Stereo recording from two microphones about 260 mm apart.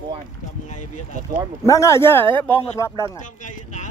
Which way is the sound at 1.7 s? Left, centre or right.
Centre.